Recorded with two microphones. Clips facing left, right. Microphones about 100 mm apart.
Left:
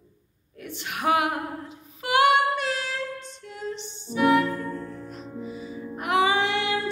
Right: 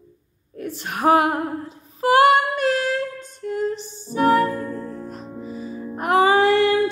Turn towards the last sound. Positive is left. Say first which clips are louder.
# right 8 dB
turn(degrees=-45)  # may be behind; listen again after turning